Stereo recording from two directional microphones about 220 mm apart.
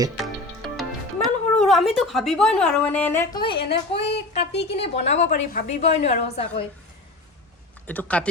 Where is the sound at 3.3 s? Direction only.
45° left (ahead or behind).